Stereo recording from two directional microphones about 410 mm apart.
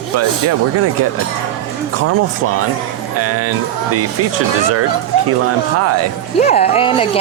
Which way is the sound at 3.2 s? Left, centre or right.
Right.